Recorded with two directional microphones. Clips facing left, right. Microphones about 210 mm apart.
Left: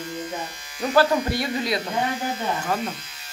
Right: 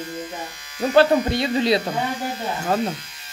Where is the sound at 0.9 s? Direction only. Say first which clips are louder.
Right 4 dB; 25° right (ahead or behind).